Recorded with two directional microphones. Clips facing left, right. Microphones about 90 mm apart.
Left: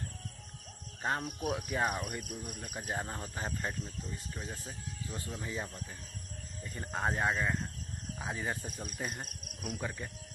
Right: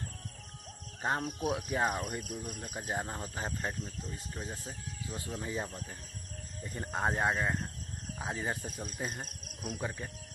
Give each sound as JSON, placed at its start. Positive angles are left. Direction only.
{"t": 1.0, "sound": "speech", "side_deg": -20}
{"t": 2.9, "sound": "speech", "side_deg": -15}
{"t": 9.8, "sound": "speech", "side_deg": -10}